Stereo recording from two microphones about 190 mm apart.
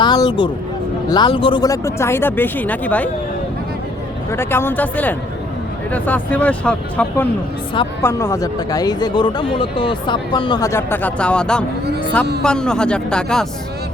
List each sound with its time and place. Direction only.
0.0 s music: 20° left (ahead or behind)
1.1 s speech: 25° left (ahead or behind); by 3.1 s 10° left (ahead or behind)
4.3 s speech: 10° left (ahead or behind)